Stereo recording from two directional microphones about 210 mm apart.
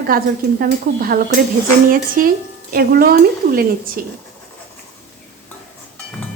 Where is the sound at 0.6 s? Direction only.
45° right (ahead or behind).